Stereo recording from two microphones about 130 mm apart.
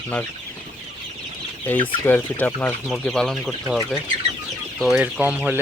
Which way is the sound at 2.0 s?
15° left (ahead or behind).